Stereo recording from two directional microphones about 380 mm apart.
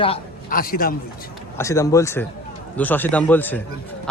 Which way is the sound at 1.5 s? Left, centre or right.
Centre.